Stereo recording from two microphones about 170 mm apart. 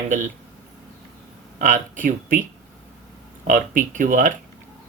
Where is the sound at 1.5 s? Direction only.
50° right (ahead or behind).